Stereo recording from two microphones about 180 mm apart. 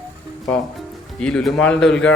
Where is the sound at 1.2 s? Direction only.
5° left (ahead or behind).